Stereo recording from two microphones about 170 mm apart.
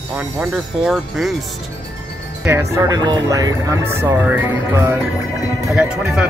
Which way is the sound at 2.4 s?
15° right (ahead or behind).